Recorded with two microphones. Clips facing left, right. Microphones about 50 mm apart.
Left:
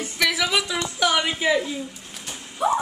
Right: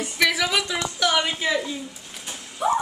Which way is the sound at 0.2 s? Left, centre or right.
Centre.